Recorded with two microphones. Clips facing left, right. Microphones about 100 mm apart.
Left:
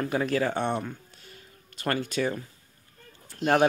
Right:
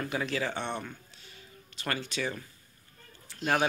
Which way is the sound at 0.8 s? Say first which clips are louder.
Left 6 dB; 45° left (ahead or behind).